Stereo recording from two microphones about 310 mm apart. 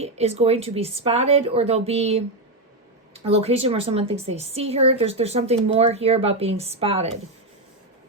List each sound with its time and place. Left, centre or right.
0.0 s a woman's voice: centre